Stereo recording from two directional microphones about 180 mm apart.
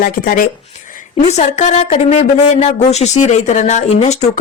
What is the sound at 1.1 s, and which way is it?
A woman's voice, 40° left (ahead or behind).